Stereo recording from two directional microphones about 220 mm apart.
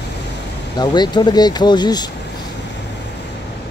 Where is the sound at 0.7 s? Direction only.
20° left (ahead or behind).